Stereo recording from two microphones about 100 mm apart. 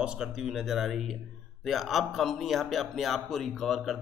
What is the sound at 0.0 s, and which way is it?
Speech, 10° right (ahead or behind).